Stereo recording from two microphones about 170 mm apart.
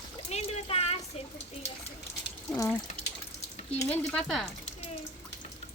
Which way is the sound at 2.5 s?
15° left (ahead or behind).